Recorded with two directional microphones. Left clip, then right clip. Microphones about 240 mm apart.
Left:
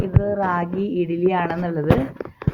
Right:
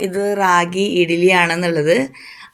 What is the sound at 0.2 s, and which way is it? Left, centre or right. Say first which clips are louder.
Speech: right 8 dB; right.